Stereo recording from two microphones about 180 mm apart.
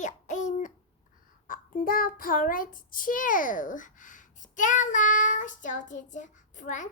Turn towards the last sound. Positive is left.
turn(degrees=45)  # may be behind; listen again after turning